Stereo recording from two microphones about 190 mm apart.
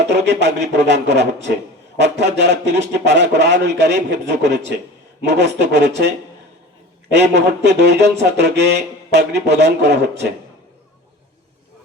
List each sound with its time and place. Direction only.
0.1 s speech: 65° right (ahead or behind)
7.1 s speech: 65° right (ahead or behind)